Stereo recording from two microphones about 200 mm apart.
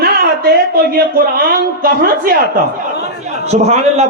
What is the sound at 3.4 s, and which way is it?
Speech, 35° right (ahead or behind).